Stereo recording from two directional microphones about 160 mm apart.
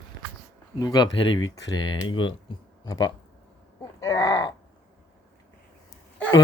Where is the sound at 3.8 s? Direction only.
20° left (ahead or behind).